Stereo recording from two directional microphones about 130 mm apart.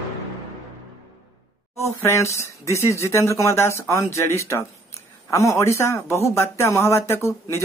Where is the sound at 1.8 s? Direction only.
20° left (ahead or behind).